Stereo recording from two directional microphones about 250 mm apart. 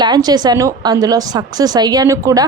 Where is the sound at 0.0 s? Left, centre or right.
Centre.